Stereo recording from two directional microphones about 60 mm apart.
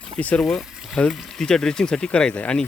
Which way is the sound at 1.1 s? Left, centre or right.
Centre.